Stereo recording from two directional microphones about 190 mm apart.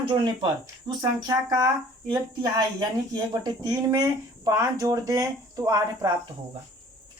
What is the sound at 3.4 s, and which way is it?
Speech, 20° right (ahead or behind).